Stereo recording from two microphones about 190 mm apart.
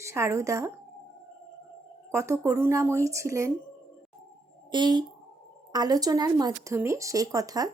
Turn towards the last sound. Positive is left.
turn(degrees=-20)  # may be behind; listen again after turning